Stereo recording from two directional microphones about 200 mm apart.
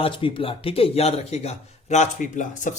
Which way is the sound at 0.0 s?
25° left (ahead or behind).